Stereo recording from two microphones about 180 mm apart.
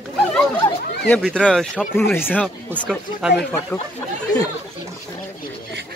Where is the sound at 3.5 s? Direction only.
10° left (ahead or behind).